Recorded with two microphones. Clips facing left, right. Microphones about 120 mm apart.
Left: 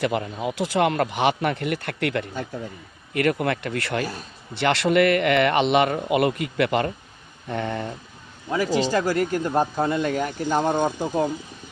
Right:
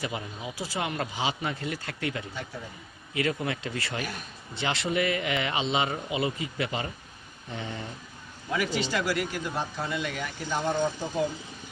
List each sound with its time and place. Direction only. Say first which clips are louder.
0.0 s speech: left 10 dB; 65° left (ahead or behind)
8.5 s speech: left 7 dB; 35° left (ahead or behind)